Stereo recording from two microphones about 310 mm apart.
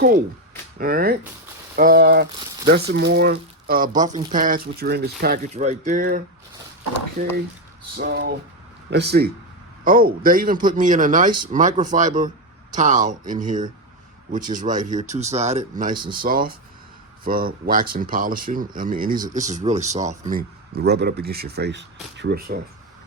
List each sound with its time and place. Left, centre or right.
0.8 s a man's voice: right